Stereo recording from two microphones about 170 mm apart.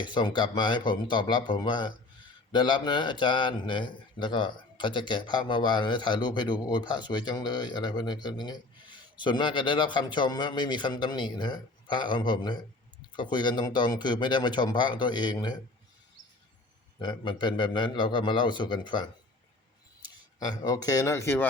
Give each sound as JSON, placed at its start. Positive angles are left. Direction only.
{"t": 0.0, "sound": "a man's voice", "side_deg": 25}
{"t": 17.0, "sound": "a man's voice", "side_deg": 25}